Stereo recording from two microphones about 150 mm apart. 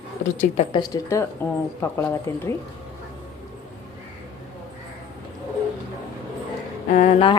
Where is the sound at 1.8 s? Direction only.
15° left (ahead or behind).